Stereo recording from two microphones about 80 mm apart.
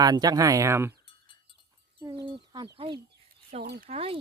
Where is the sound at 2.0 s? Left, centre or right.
Right.